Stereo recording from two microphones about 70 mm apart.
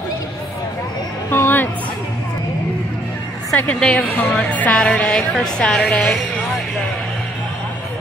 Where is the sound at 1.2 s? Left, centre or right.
Left.